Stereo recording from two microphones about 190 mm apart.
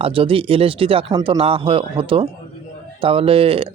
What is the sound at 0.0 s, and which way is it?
Speech, 30° right (ahead or behind).